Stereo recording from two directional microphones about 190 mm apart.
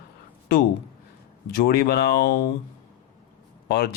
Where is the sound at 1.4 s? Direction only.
55° left (ahead or behind).